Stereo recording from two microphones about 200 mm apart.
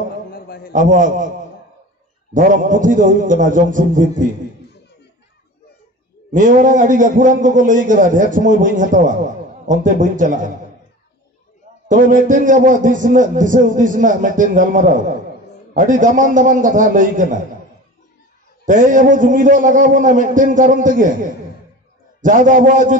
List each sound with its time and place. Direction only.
0.3 s a sound: 50° left (ahead or behind)
0.7 s a man's voice: 40° right (ahead or behind)
2.3 s a man's voice: 40° right (ahead or behind)
6.3 s a man's voice: 40° right (ahead or behind)
11.9 s a man's voice: 40° right (ahead or behind)
18.7 s a man's voice: 40° right (ahead or behind)